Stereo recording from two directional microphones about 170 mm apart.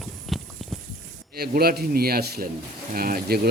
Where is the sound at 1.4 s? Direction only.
65° right (ahead or behind).